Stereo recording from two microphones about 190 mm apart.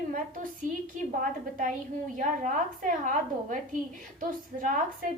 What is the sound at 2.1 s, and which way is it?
A woman's voice, 45° right (ahead or behind).